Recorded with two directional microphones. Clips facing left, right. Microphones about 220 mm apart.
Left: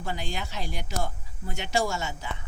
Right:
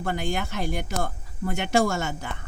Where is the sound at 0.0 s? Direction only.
55° right (ahead or behind).